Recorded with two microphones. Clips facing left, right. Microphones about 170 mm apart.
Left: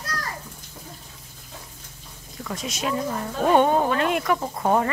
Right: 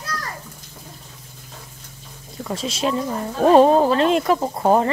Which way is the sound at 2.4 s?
30° right (ahead or behind).